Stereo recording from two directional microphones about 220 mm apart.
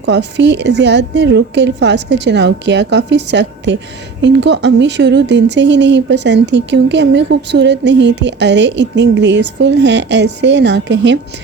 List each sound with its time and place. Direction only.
0.1 s speech: 50° right (ahead or behind)